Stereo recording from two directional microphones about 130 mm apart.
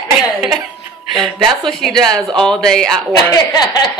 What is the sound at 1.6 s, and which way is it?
A woman's voice, 5° left (ahead or behind).